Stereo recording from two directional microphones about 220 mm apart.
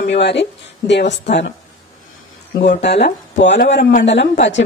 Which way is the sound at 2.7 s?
50° left (ahead or behind).